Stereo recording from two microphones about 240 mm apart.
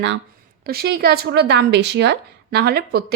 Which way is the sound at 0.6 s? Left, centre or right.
Right.